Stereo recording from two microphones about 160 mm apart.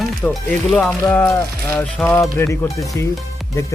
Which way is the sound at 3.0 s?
15° left (ahead or behind).